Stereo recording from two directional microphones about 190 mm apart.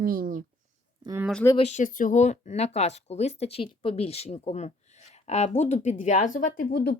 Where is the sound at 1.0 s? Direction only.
15° right (ahead or behind).